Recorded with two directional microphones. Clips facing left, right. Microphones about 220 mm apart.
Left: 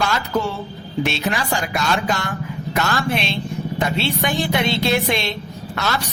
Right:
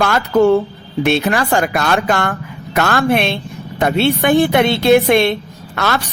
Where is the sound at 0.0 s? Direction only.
55° right (ahead or behind).